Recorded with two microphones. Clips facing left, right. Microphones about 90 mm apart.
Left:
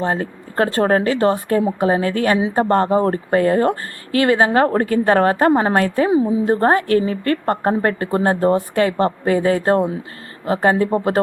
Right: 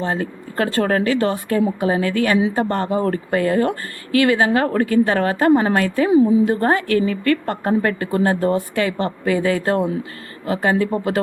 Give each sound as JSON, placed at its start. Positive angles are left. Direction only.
{"t": 0.0, "sound": "a woman's voice", "side_deg": 40}